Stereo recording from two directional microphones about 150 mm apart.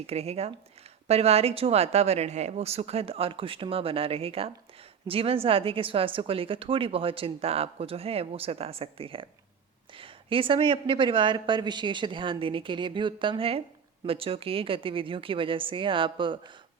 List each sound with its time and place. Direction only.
0.1 s a woman's voice: 45° right (ahead or behind)